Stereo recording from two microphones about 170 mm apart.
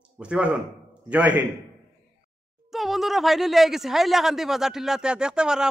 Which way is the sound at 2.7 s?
Centre (ahead or behind).